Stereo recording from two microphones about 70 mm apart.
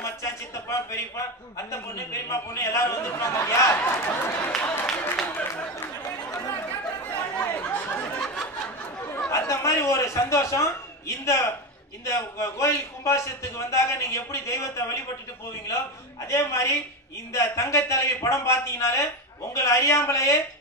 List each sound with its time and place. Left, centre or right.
0.0 s a man's voice: left
3.8 s speech: left
6.6 s chatter: left
9.3 s a man's voice: left
16.3 s a man's voice: left